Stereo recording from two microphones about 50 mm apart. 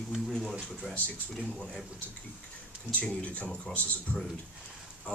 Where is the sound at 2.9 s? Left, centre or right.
Left.